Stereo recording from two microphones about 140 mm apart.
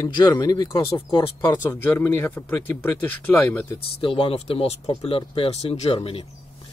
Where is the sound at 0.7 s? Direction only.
35° left (ahead or behind).